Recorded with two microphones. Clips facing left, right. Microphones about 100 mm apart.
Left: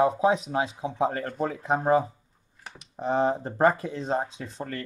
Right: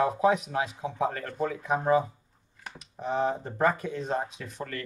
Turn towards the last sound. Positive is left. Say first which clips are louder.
# left 2 dB
turn(degrees=30)  # may be behind; listen again after turning